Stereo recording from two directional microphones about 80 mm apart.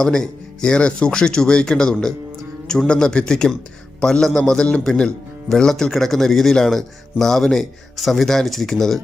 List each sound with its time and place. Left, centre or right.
0.0 s a man's voice: centre